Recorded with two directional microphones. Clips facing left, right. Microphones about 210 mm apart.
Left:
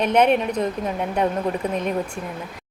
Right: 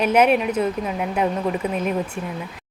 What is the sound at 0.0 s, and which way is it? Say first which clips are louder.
Speech: right 1 dB; 5° right (ahead or behind).